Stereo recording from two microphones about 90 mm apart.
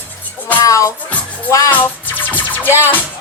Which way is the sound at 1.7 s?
20° left (ahead or behind).